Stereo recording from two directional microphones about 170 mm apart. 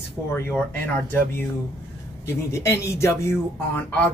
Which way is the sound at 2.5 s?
15° left (ahead or behind).